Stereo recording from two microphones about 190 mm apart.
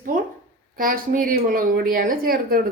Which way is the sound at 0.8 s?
45° right (ahead or behind).